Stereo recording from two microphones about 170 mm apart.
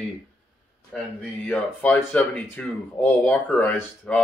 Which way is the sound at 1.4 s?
10° left (ahead or behind).